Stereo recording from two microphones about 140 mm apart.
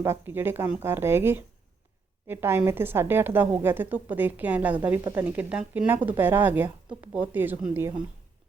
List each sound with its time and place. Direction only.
0.0 s a woman's voice: 15° right (ahead or behind)